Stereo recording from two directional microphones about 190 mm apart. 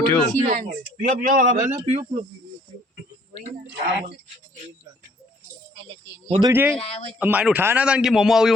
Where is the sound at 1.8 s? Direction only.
35° right (ahead or behind).